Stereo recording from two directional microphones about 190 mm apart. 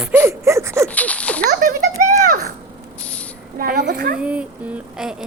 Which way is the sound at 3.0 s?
5° left (ahead or behind).